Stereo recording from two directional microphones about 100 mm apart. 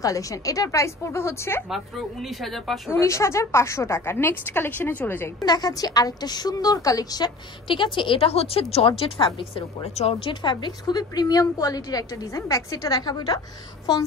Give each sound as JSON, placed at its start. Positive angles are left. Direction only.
{"t": 0.0, "sound": "a woman's voice", "side_deg": 35}
{"t": 1.7, "sound": "a woman's voice", "side_deg": 0}
{"t": 2.9, "sound": "a woman's voice", "side_deg": 30}
{"t": 5.4, "sound": "a woman's voice", "side_deg": 40}
{"t": 10.2, "sound": "a woman's voice", "side_deg": 50}